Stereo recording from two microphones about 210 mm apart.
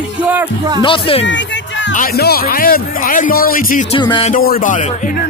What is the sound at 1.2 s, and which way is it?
Music, 60° left (ahead or behind).